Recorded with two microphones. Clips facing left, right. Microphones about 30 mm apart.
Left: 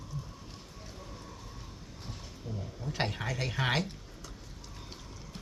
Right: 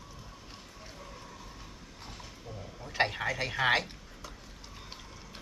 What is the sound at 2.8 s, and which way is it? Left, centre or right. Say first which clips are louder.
Speech: right 4 dB; centre.